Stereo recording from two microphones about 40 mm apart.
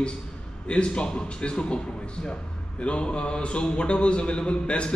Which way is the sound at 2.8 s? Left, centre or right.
Left.